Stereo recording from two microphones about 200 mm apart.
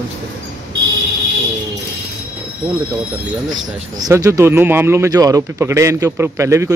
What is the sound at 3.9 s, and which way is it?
Speech, 15° right (ahead or behind).